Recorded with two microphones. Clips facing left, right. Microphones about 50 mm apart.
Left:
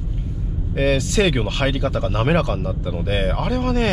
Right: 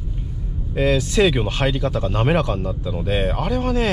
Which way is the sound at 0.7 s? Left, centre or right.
Centre.